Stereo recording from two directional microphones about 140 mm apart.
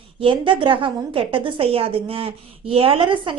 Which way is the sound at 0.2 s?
40° right (ahead or behind).